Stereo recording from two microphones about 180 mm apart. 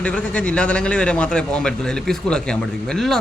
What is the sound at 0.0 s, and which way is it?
A man's voice, 5° left (ahead or behind).